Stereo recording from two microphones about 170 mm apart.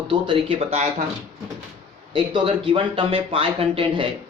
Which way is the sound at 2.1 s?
30° right (ahead or behind).